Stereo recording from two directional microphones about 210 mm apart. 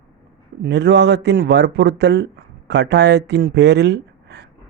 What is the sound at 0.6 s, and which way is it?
A man's voice, 55° right (ahead or behind).